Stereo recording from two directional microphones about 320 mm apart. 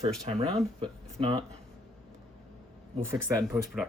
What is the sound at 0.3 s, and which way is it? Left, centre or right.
Speech, centre.